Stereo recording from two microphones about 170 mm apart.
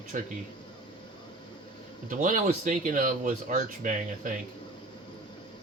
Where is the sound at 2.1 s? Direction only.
50° right (ahead or behind).